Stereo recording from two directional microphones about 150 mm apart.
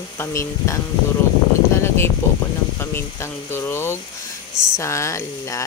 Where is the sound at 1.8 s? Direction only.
15° left (ahead or behind).